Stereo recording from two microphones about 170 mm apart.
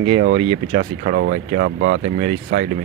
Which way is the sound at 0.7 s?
50° right (ahead or behind).